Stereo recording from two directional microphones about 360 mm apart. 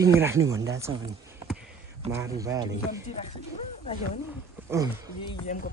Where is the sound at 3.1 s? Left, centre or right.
Centre.